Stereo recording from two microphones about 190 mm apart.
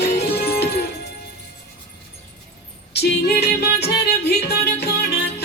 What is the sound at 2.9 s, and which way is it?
Music, 60° left (ahead or behind).